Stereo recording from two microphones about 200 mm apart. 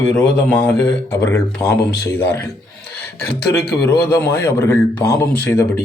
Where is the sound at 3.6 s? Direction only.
55° left (ahead or behind).